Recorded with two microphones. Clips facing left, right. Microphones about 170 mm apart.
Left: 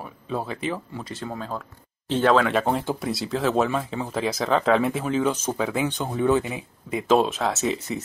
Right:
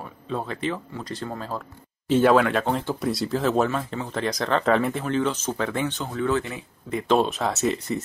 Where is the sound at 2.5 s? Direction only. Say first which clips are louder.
Left 1 dB; 5° left (ahead or behind).